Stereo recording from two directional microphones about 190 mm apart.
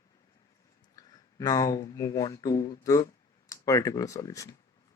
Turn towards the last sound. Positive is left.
turn(degrees=15)  # may be behind; listen again after turning